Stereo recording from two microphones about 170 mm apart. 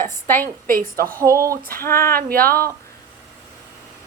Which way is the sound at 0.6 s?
55° right (ahead or behind).